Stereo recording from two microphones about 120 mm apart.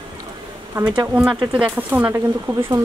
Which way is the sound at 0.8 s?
35° right (ahead or behind).